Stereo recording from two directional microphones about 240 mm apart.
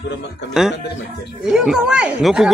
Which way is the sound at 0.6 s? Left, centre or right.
Centre.